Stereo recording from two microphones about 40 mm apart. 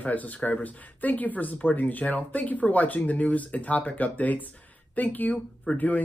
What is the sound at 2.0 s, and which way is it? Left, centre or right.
Speech, left.